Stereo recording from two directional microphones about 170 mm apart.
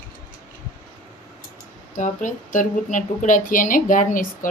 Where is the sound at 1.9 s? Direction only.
50° left (ahead or behind).